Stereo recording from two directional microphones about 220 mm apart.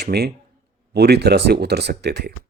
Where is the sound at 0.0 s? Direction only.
45° right (ahead or behind).